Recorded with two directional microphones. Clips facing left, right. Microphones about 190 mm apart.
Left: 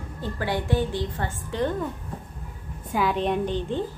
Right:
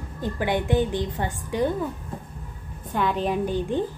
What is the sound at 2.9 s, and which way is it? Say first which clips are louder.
Speech: even; centre (ahead or behind).